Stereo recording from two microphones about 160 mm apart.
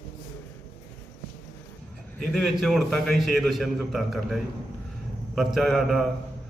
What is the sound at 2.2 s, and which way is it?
A man's voice, centre (ahead or behind).